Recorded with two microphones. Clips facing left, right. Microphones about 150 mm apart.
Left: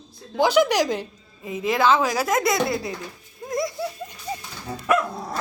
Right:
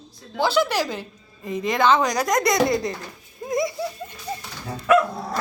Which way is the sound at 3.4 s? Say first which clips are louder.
Right 2 dB; centre (ahead or behind).